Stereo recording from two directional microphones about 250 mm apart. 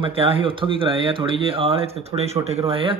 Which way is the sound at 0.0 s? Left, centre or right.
Right.